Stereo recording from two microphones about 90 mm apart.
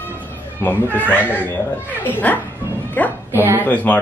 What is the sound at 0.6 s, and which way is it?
Children playing, 25° left (ahead or behind).